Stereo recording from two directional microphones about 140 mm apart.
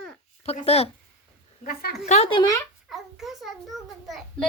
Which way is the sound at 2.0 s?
50° left (ahead or behind).